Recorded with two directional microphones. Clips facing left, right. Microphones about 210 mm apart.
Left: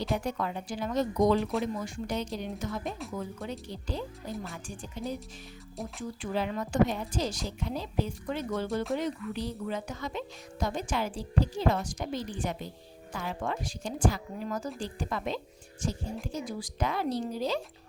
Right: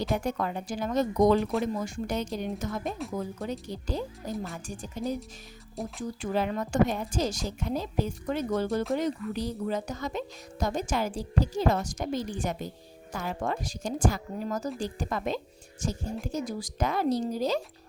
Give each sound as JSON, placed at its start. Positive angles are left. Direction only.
{"t": 0.3, "sound": "speech", "side_deg": -45}
{"t": 1.4, "sound": "speech", "side_deg": 0}
{"t": 1.6, "sound": "speech", "side_deg": -45}
{"t": 8.6, "sound": "speech", "side_deg": 0}
{"t": 9.0, "sound": "speech", "side_deg": -40}